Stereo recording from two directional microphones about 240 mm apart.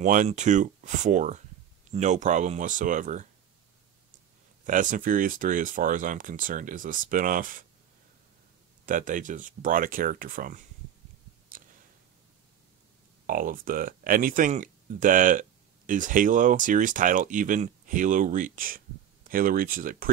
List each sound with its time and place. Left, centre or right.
0.0 s speech: right
4.6 s speech: right
8.8 s speech: right
13.3 s speech: right